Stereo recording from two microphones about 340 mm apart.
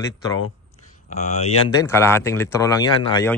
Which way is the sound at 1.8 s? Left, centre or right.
Centre.